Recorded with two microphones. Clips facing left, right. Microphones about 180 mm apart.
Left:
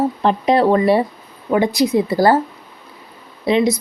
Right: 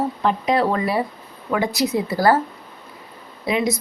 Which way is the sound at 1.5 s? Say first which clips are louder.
Left 5 dB; 20° left (ahead or behind).